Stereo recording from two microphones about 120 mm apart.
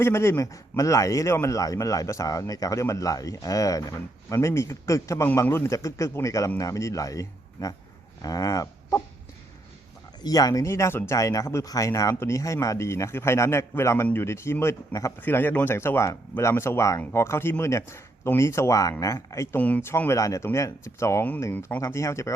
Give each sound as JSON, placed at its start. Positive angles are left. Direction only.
{"t": 0.0, "sound": "speech", "side_deg": 20}
{"t": 10.2, "sound": "speech", "side_deg": 30}
{"t": 19.5, "sound": "speech", "side_deg": 15}